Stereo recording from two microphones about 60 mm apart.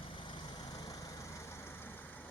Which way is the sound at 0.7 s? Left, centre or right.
Left.